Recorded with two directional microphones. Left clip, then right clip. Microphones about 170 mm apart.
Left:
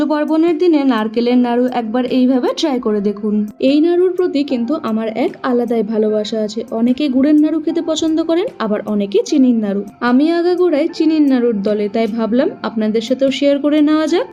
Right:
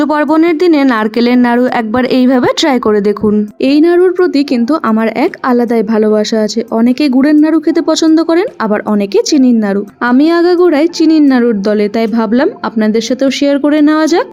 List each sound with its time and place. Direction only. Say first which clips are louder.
0.0 s a woman's voice: right 5 dB; 50° right (ahead or behind); by 14.3 s 35° right (ahead or behind)